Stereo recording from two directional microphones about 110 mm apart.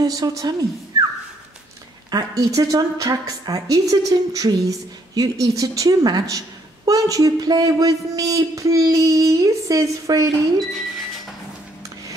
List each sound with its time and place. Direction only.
0.0 s a woman's voice: 35° right (ahead or behind)
2.0 s a woman's voice: 35° right (ahead or behind)
10.6 s speech: centre (ahead or behind)